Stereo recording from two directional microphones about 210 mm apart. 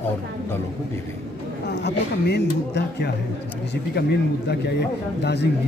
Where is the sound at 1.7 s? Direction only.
50° left (ahead or behind).